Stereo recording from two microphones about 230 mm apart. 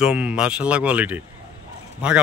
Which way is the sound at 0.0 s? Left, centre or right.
Centre.